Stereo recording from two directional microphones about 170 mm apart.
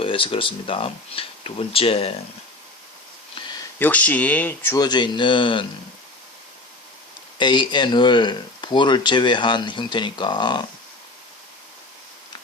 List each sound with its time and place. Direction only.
0.0 s speech: 30° left (ahead or behind)
3.8 s speech: 10° left (ahead or behind); by 5.6 s 30° left (ahead or behind)
7.3 s speech: 25° left (ahead or behind)